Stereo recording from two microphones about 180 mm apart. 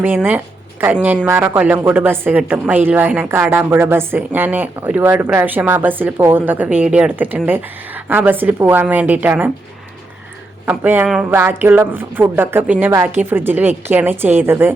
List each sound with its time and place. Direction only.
0.0 s a woman's voice: 10° right (ahead or behind)
10.7 s a woman's voice: 10° right (ahead or behind)